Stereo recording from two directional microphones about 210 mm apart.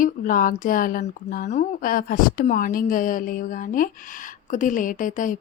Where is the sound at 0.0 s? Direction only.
40° left (ahead or behind).